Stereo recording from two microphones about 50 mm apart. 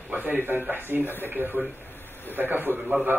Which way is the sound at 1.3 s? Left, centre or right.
Right.